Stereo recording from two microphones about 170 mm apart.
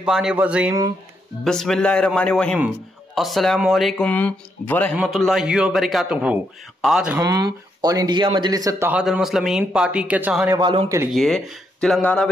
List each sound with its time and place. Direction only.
0.0 s speech: 5° right (ahead or behind)
1.4 s speech: 5° left (ahead or behind)
4.9 s speech: centre (ahead or behind)
7.2 s speech: 20° right (ahead or behind)
10.6 s a man's voice: 30° right (ahead or behind)
11.1 s speech: centre (ahead or behind)